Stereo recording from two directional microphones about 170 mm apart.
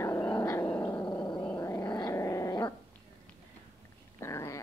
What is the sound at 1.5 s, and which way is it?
Growling, 15° left (ahead or behind).